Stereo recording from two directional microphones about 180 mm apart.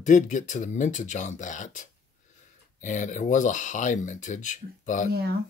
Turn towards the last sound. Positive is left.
turn(degrees=-60)  # may be behind; listen again after turning